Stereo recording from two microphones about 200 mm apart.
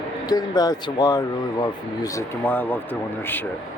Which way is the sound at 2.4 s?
10° left (ahead or behind).